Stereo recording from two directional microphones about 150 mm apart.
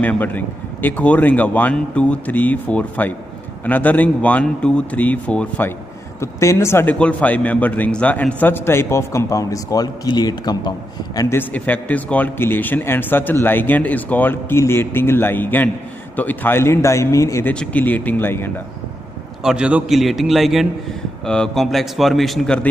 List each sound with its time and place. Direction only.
0.0 s a man's voice: 10° left (ahead or behind); by 10.7 s 25° left (ahead or behind)
11.1 s a man's voice: 15° left (ahead or behind)
19.4 s speech: 5° right (ahead or behind)